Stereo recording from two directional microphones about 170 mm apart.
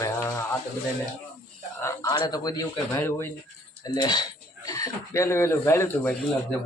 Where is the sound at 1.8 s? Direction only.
25° left (ahead or behind).